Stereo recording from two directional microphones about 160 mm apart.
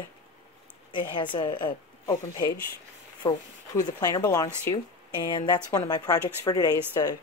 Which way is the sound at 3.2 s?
30° left (ahead or behind).